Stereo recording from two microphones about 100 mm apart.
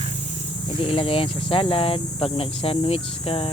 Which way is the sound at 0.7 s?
65° left (ahead or behind).